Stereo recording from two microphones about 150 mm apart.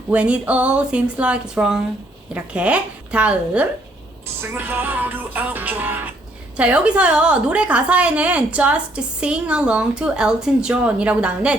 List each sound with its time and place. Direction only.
0.1 s a woman's voice: 10° right (ahead or behind)